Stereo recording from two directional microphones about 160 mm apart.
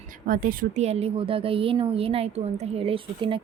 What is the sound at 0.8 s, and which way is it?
A woman's voice, 40° right (ahead or behind).